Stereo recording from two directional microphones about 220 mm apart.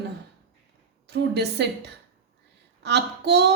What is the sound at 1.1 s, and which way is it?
A woman's voice, 50° right (ahead or behind).